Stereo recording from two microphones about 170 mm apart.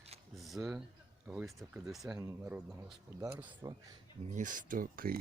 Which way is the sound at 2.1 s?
20° right (ahead or behind).